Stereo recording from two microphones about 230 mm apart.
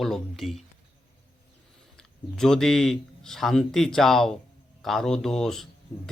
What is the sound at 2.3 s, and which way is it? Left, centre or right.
Speech, centre.